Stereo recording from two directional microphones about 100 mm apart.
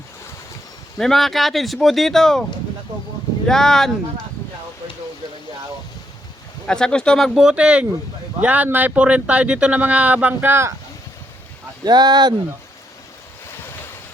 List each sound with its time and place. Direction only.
0.9 s speech: 5° left (ahead or behind)
3.4 s speech: 5° left (ahead or behind)
6.7 s speech: 5° left (ahead or behind); by 10.8 s 25° right (ahead or behind)
11.9 s speech: 45° right (ahead or behind)